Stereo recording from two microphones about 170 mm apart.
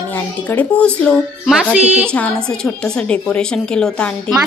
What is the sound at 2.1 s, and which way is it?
A woman's voice, 5° left (ahead or behind).